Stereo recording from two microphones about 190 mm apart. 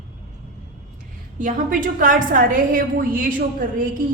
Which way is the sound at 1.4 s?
45° right (ahead or behind).